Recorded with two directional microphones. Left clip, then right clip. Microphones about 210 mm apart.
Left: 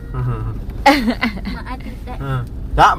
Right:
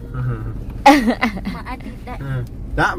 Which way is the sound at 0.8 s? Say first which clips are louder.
Right 2 dB; 25° right (ahead or behind).